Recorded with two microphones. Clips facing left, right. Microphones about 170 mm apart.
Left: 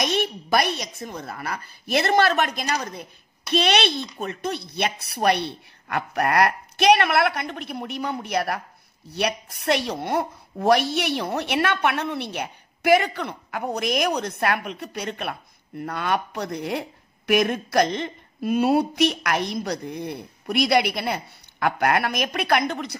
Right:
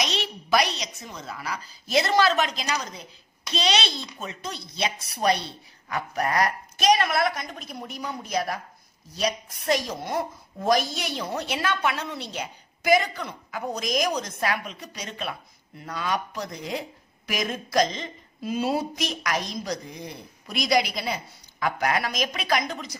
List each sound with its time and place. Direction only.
0.0 s a woman's voice: 55° left (ahead or behind)